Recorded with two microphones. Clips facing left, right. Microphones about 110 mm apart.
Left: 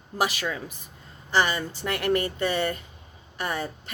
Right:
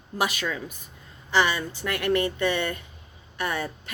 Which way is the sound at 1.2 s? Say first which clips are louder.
Right 1 dB; 40° left (ahead or behind).